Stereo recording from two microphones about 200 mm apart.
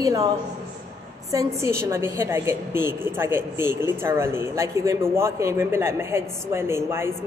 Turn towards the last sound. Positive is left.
turn(degrees=-10)  # may be behind; listen again after turning